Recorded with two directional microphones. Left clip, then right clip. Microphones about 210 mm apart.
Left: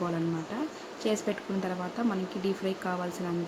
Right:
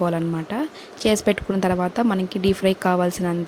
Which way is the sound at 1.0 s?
45° right (ahead or behind).